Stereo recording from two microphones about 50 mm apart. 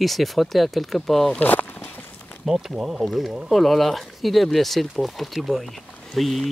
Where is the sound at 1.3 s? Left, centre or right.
Left.